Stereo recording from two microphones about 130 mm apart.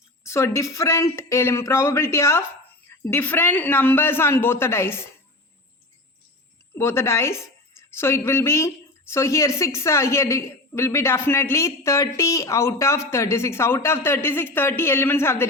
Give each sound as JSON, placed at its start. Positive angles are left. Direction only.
{"t": 0.2, "sound": "a woman's voice", "side_deg": 20}
{"t": 6.7, "sound": "a woman's voice", "side_deg": 20}